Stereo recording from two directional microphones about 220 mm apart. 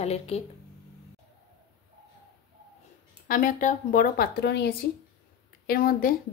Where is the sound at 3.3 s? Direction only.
35° left (ahead or behind).